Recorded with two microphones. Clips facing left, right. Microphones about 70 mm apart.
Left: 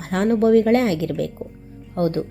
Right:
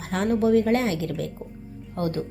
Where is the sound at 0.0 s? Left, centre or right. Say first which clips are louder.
Left 5 dB; left.